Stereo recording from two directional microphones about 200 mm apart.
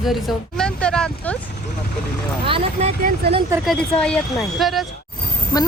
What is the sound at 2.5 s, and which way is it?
Speech, 30° right (ahead or behind).